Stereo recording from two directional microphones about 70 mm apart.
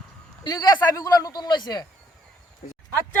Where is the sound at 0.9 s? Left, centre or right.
Left.